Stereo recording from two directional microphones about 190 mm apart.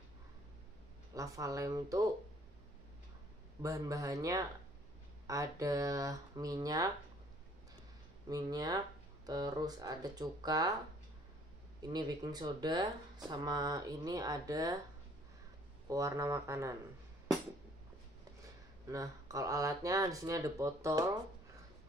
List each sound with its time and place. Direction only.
1.1 s speech: 15° right (ahead or behind)
3.6 s speech: 15° right (ahead or behind)
8.3 s speech: 20° right (ahead or behind)
11.8 s speech: 20° right (ahead or behind)
15.9 s speech: 15° right (ahead or behind)
18.9 s speech: 15° right (ahead or behind)